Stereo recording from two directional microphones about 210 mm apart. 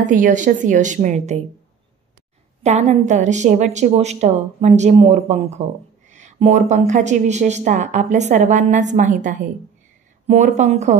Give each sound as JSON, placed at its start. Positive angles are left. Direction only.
{"t": 0.0, "sound": "speech", "side_deg": -35}
{"t": 2.6, "sound": "speech", "side_deg": -35}